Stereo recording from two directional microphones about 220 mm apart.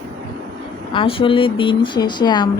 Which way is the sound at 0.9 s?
25° left (ahead or behind).